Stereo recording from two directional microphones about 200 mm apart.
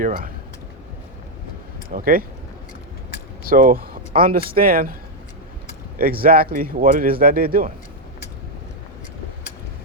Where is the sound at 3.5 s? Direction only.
45° right (ahead or behind).